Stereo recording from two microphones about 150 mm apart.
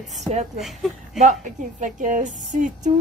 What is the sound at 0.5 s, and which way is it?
Speech, centre (ahead or behind).